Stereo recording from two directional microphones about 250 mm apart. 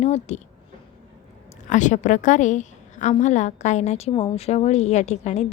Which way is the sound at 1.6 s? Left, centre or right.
Left.